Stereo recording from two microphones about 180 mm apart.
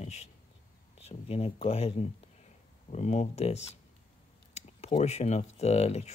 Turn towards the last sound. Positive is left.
turn(degrees=35)  # may be behind; listen again after turning